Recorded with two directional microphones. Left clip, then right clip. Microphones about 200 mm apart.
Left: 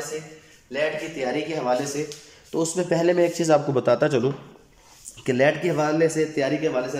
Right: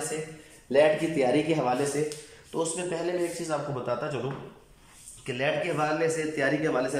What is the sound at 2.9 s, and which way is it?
Speech, 35° left (ahead or behind).